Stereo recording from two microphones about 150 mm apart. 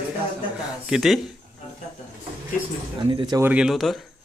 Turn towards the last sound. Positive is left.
turn(degrees=0)  # may be behind; listen again after turning